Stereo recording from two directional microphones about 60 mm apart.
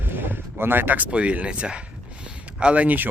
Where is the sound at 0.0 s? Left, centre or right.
Right.